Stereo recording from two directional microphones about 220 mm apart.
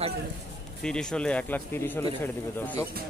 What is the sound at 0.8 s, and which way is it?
A man's voice, 5° left (ahead or behind).